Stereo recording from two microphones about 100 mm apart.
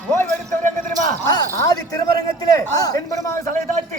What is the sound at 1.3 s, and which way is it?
A woman's voice, 40° left (ahead or behind).